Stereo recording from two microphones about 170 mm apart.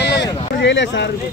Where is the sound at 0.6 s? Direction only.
90° left.